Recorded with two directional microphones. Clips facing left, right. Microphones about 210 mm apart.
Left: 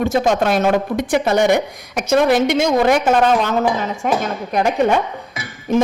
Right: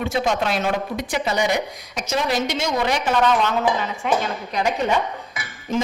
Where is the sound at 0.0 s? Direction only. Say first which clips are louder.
Left 6 dB; 45° left (ahead or behind).